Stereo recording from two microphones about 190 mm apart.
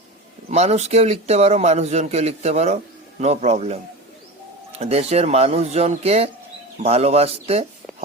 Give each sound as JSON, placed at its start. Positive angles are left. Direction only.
{"t": 0.5, "sound": "a man's voice", "side_deg": -35}
{"t": 4.8, "sound": "a man's voice", "side_deg": -35}